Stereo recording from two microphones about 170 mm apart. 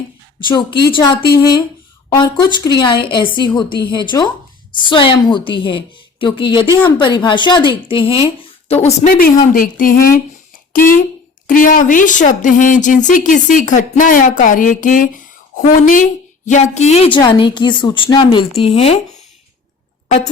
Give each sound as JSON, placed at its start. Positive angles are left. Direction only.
{"t": 0.3, "sound": "a woman's voice", "side_deg": 30}
{"t": 9.0, "sound": "a woman's voice", "side_deg": 55}